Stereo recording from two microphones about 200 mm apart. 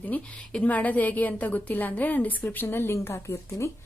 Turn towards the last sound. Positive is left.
turn(degrees=15)  # may be behind; listen again after turning